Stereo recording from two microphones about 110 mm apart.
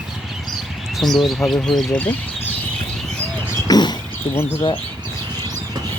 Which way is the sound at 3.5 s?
40° left (ahead or behind).